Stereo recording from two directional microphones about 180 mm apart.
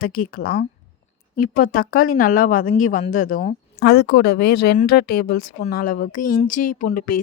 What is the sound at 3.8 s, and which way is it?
A woman's voice, 65° left (ahead or behind).